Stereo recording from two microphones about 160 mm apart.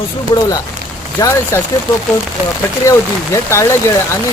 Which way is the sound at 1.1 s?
20° left (ahead or behind).